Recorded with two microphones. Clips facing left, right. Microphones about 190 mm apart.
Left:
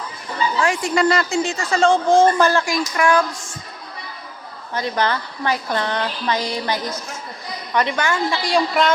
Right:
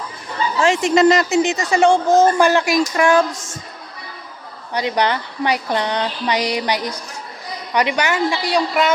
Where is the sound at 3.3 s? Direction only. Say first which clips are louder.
Right 2 dB; 45° right (ahead or behind).